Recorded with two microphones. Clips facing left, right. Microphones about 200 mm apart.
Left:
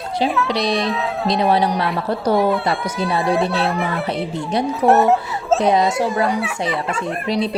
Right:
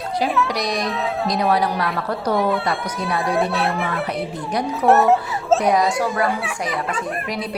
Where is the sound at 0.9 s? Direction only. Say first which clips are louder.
Left 1 dB; centre (ahead or behind).